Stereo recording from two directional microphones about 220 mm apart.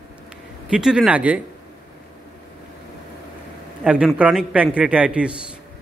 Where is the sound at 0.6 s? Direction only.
5° right (ahead or behind).